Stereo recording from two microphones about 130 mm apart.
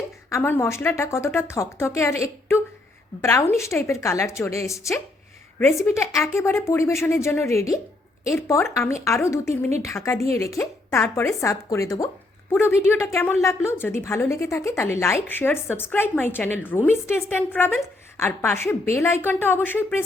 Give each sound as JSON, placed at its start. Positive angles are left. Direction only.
{"t": 0.3, "sound": "a woman's voice", "side_deg": 20}